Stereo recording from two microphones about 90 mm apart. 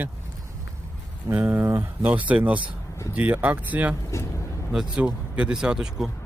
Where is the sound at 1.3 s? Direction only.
20° right (ahead or behind).